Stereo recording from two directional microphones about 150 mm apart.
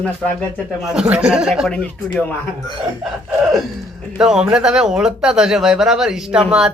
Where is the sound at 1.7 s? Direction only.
5° left (ahead or behind).